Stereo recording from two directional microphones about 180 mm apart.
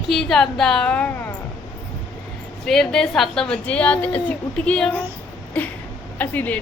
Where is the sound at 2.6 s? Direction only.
Centre (ahead or behind).